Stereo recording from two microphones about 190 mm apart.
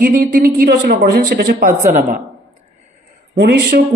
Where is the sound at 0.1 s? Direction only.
50° right (ahead or behind).